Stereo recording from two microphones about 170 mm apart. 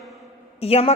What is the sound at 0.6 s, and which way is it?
Speech, 35° left (ahead or behind).